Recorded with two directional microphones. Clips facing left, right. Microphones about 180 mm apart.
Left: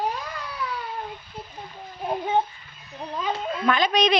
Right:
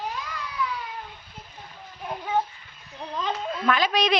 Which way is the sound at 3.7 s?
5° right (ahead or behind).